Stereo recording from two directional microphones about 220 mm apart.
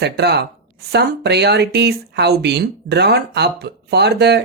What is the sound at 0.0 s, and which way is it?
Speech, 50° right (ahead or behind).